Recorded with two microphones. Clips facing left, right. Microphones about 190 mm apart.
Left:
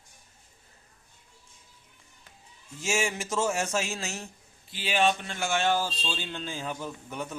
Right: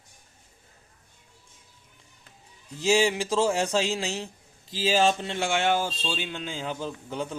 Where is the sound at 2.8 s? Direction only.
35° right (ahead or behind).